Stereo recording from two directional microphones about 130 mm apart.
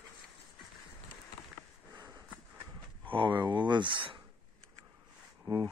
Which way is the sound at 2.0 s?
30° right (ahead or behind).